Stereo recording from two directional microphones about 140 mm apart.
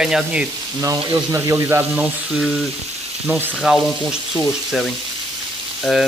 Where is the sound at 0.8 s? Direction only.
25° right (ahead or behind).